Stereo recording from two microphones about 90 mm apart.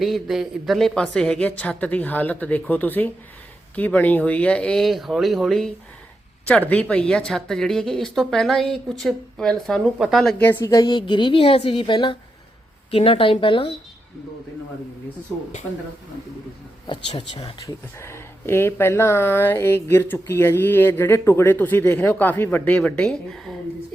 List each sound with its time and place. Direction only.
0.0 s a woman's voice: centre (ahead or behind)
6.5 s speech: 15° left (ahead or behind); by 10.3 s centre (ahead or behind)
10.8 s a woman's voice: 60° left (ahead or behind)
12.9 s speech: 90° left
16.8 s speech: 65° left (ahead or behind)
18.0 s a woman's voice: 30° left (ahead or behind)
23.0 s speech: 5° left (ahead or behind)